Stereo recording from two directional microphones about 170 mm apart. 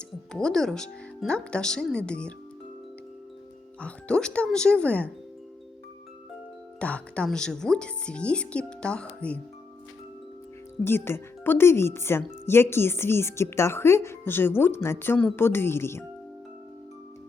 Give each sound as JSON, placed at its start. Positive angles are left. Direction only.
{"t": 0.3, "sound": "speech", "side_deg": 5}
{"t": 3.8, "sound": "speech", "side_deg": 5}
{"t": 6.7, "sound": "speech", "side_deg": 5}
{"t": 10.8, "sound": "speech", "side_deg": 15}